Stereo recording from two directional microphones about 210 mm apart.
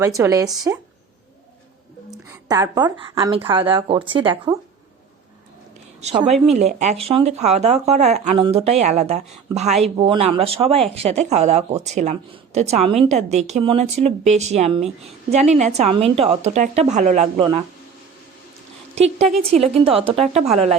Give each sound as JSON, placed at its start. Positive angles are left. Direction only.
{"t": 0.0, "sound": "speech", "side_deg": -15}
{"t": 2.5, "sound": "speech", "side_deg": -20}
{"t": 6.0, "sound": "speech", "side_deg": -30}
{"t": 18.9, "sound": "speech", "side_deg": -30}